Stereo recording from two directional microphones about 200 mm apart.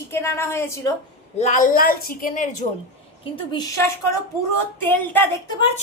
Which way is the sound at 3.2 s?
20° left (ahead or behind).